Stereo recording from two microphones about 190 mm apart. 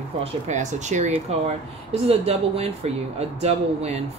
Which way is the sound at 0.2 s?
40° right (ahead or behind).